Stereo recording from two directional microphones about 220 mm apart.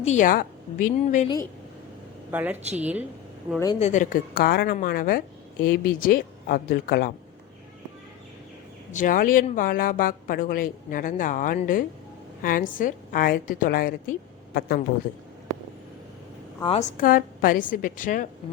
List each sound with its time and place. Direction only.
0.0 s a woman's voice: 35° left (ahead or behind)
2.3 s speech: 10° right (ahead or behind)
3.6 s a woman's voice: 25° left (ahead or behind); by 7.1 s 45° left (ahead or behind)
8.9 s a woman's voice: 35° left (ahead or behind)
16.6 s a woman's voice: 25° left (ahead or behind)
17.0 s a woman's voice: 40° left (ahead or behind)